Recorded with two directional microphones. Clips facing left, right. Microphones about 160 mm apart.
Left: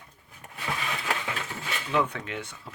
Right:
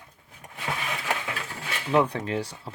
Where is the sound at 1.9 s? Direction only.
35° right (ahead or behind).